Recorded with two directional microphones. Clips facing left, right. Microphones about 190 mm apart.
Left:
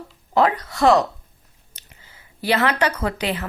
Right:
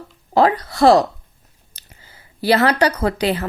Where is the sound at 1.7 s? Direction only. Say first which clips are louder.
Right 2 dB; 35° right (ahead or behind).